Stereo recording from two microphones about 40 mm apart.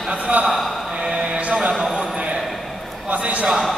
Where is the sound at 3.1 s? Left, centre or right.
Right.